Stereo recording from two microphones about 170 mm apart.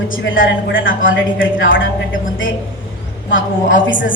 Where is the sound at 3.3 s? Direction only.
90° left.